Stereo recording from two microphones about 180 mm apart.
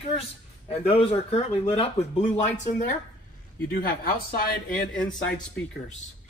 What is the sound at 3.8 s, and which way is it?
Speech, 55° left (ahead or behind).